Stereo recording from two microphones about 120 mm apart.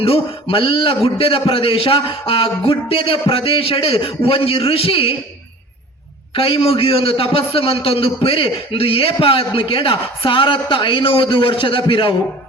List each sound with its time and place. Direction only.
0.0 s a man's voice: 50° left (ahead or behind)
6.3 s a man's voice: 50° left (ahead or behind)